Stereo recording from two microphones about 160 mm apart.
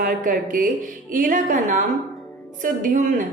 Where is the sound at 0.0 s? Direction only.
55° right (ahead or behind).